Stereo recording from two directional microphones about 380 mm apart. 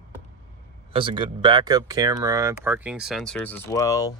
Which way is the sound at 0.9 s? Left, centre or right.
Centre.